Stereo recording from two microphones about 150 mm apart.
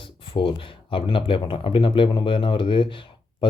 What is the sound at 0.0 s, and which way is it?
Speech, 35° left (ahead or behind).